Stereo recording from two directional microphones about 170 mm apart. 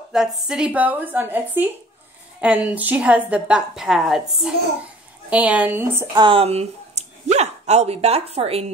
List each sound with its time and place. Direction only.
0.1 s a woman's voice: 5° right (ahead or behind)
6.1 s speech: 30° right (ahead or behind)